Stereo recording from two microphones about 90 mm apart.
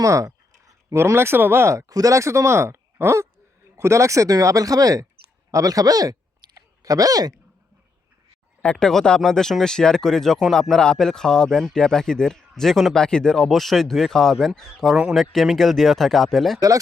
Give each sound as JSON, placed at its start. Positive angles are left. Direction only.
{"t": 0.0, "sound": "a sound", "side_deg": -40}
{"t": 0.9, "sound": "speech", "side_deg": -30}
{"t": 5.5, "sound": "clicking", "side_deg": -40}
{"t": 8.6, "sound": "speech", "side_deg": 10}
{"t": 16.6, "sound": "speech", "side_deg": -40}